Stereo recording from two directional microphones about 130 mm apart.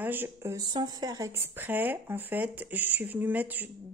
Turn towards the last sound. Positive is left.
turn(degrees=-15)  # may be behind; listen again after turning